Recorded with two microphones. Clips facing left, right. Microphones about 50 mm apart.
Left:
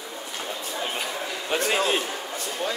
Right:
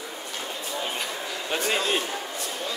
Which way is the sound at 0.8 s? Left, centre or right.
Centre.